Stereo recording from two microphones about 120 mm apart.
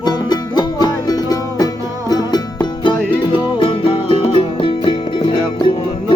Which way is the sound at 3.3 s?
45° left (ahead or behind).